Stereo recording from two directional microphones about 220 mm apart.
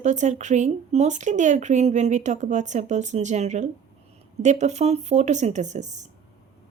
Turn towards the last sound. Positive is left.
turn(degrees=-30)  # may be behind; listen again after turning